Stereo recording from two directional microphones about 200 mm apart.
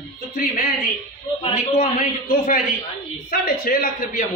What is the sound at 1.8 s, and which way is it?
A man's voice, 40° left (ahead or behind).